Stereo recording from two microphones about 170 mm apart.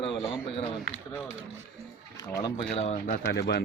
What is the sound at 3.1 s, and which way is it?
Speech, 65° left (ahead or behind).